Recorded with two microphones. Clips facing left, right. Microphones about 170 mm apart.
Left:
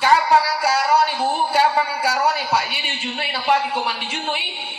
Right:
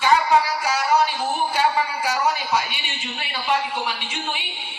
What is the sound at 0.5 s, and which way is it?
Speech, 65° left (ahead or behind).